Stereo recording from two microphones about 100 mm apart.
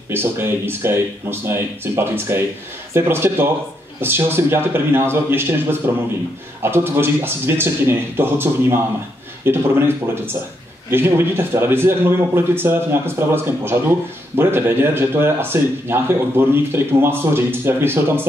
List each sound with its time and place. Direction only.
0.1 s a man's voice: 25° right (ahead or behind)